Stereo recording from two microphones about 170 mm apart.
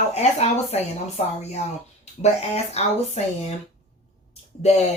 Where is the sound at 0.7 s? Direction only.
40° left (ahead or behind).